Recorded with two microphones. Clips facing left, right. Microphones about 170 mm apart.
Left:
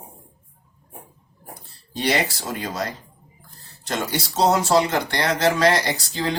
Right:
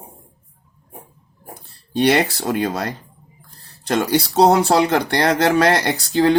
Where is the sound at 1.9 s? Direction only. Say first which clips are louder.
Right 7 dB; 60° right (ahead or behind).